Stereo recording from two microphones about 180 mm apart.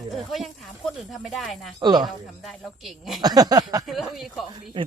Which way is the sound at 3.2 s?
20° right (ahead or behind).